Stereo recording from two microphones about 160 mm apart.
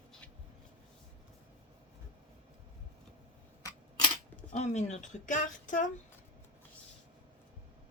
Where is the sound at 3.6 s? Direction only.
20° left (ahead or behind).